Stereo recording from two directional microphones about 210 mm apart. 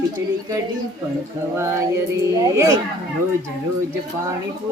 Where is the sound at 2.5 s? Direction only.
15° right (ahead or behind).